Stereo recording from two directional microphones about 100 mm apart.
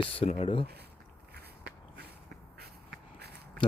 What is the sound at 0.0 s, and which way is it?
Speech, 65° left (ahead or behind).